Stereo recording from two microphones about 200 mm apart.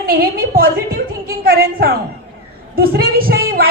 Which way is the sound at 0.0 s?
45° right (ahead or behind).